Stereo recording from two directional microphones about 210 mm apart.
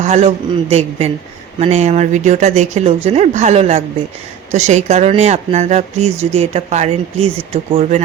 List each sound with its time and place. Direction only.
0.0 s a woman's voice: 30° right (ahead or behind)